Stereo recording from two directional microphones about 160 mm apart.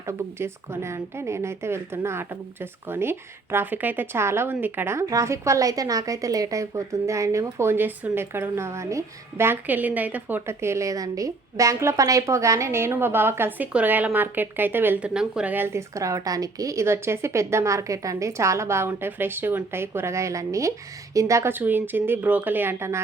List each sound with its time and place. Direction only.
0.1 s a woman's voice: 15° right (ahead or behind)